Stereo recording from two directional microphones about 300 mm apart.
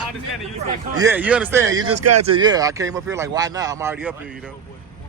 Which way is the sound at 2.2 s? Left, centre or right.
Centre.